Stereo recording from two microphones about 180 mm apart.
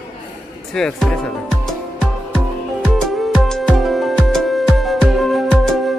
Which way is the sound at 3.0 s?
Centre (ahead or behind).